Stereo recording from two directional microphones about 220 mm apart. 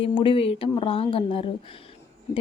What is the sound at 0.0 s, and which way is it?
Speech, 25° left (ahead or behind).